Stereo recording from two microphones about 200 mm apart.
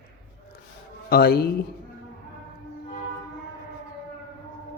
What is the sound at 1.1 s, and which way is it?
Speech, 50° left (ahead or behind).